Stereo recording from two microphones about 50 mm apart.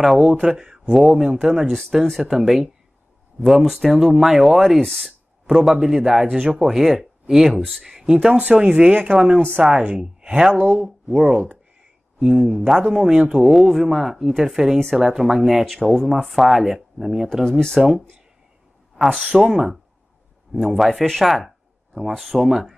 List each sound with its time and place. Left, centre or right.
0.0 s speech: centre
0.3 s speech: centre
5.5 s speech: centre
8.3 s speech: right
9.0 s speech: centre
9.7 s speech: right
9.9 s speech: centre
10.5 s speech: right
11.1 s speech: right
13.4 s speech: centre
17.5 s speech: centre
17.7 s speech: centre
19.2 s speech: centre
20.5 s speech: centre